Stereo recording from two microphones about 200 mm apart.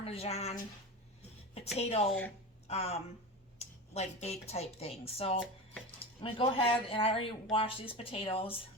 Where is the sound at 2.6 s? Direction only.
35° left (ahead or behind).